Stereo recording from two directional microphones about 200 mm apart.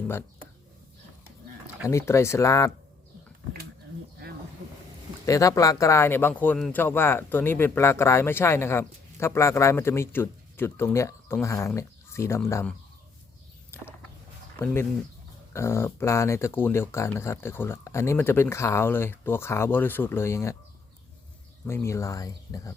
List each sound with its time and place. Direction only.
1.9 s speech: 15° left (ahead or behind)
5.2 s speech: 15° left (ahead or behind)
13.7 s walk: 10° left (ahead or behind)
14.6 s speech: 10° left (ahead or behind)
21.7 s speech: 15° left (ahead or behind)